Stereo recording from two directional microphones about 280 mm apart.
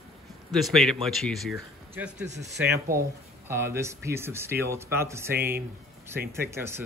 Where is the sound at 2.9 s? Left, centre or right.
Right.